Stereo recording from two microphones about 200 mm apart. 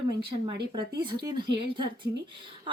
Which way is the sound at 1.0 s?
20° right (ahead or behind).